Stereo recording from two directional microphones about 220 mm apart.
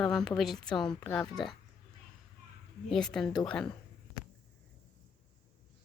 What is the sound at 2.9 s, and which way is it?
Speech, centre (ahead or behind).